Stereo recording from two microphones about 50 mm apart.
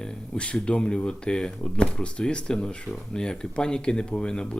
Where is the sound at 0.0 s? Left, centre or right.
Centre.